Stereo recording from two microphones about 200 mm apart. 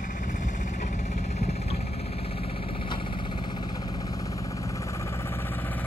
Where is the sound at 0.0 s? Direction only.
40° left (ahead or behind).